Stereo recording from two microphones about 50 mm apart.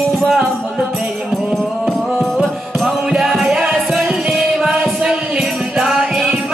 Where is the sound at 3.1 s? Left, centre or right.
Centre.